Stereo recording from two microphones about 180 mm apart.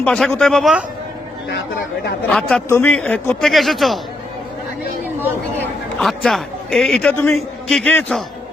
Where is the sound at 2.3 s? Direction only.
5° left (ahead or behind).